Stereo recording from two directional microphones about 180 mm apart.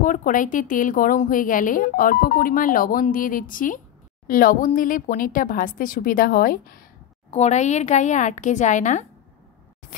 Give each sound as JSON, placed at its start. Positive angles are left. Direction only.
{"t": 0.0, "sound": "a woman's voice", "side_deg": 50}
{"t": 7.3, "sound": "a woman's voice", "side_deg": 40}